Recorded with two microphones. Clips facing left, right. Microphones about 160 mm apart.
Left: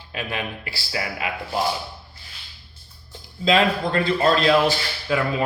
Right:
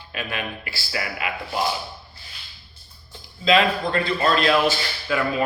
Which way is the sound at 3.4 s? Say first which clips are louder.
Even; 40° left (ahead or behind).